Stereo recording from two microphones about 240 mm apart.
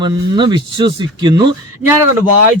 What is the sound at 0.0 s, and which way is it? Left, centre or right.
Speech, centre.